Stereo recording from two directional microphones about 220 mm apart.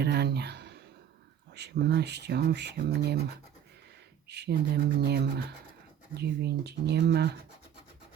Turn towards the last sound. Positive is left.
turn(degrees=-50)  # may be behind; listen again after turning